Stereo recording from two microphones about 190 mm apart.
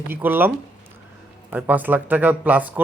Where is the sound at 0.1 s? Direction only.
10° right (ahead or behind).